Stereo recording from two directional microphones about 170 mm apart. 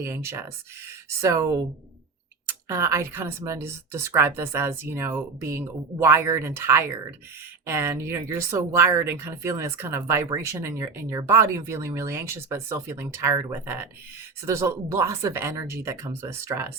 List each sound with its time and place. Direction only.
0.0 s speech: 15° right (ahead or behind)